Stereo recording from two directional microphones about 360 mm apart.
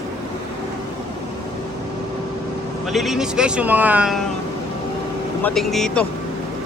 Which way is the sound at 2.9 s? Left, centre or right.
Centre.